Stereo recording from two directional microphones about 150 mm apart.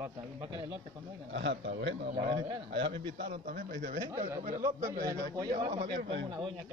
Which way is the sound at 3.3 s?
75° right (ahead or behind).